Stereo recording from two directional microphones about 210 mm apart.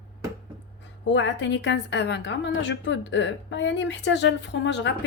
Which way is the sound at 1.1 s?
60° left (ahead or behind).